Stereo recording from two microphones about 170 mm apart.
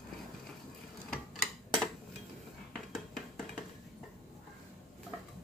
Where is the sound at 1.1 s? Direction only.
Centre (ahead or behind).